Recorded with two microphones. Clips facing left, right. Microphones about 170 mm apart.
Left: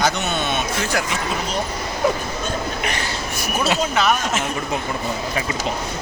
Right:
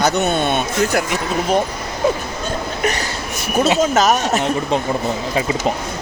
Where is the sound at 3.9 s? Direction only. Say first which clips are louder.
Right 4 dB; 40° right (ahead or behind).